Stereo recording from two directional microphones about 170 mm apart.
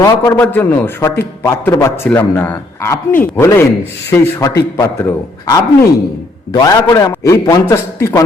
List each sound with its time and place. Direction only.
0.0 s a man's voice: 20° left (ahead or behind)